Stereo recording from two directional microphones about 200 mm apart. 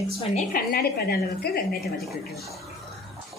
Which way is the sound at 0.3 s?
45° left (ahead or behind).